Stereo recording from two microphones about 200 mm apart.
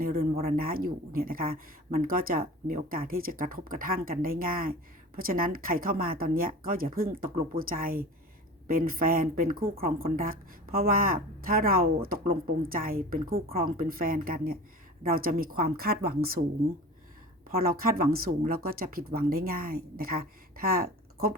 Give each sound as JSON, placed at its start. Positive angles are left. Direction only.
{"t": 0.0, "sound": "a sound", "side_deg": -45}
{"t": 0.4, "sound": "a woman's voice", "side_deg": -45}
{"t": 17.5, "sound": "a woman's voice", "side_deg": -45}